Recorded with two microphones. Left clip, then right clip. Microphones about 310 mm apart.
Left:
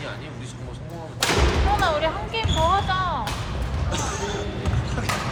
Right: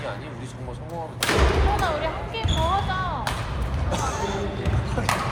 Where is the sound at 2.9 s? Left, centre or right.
Left.